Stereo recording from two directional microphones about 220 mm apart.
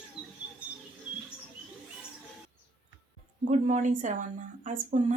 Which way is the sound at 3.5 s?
35° right (ahead or behind).